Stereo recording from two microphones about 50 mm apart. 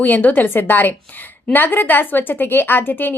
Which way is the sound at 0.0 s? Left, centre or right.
Left.